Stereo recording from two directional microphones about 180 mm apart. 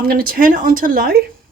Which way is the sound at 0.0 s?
55° right (ahead or behind).